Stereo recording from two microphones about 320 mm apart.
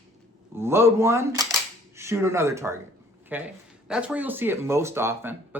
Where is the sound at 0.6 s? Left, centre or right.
Centre.